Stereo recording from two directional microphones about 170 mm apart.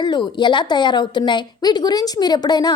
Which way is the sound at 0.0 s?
25° left (ahead or behind).